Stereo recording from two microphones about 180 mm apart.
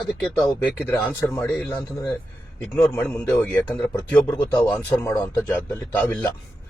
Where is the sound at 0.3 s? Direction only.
5° left (ahead or behind).